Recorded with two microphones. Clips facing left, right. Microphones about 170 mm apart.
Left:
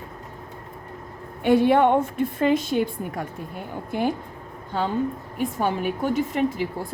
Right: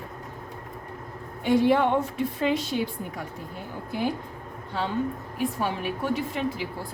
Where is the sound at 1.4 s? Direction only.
60° left (ahead or behind).